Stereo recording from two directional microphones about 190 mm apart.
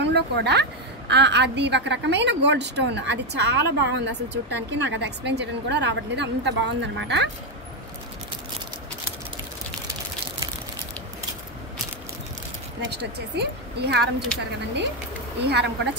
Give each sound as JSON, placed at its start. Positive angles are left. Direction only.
{"t": 0.0, "sound": "a woman's voice", "side_deg": -60}
{"t": 12.9, "sound": "a woman's voice", "side_deg": -60}
{"t": 14.3, "sound": "speech", "side_deg": 5}
{"t": 15.4, "sound": "a woman's voice", "side_deg": -60}